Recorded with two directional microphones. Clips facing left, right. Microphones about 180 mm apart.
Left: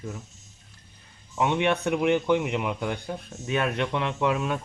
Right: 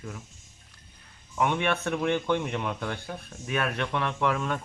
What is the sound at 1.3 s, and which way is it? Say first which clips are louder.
A man's voice: left 3 dB; 20° left (ahead or behind).